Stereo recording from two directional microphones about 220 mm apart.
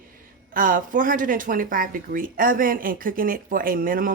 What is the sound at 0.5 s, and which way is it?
Speech, 40° right (ahead or behind).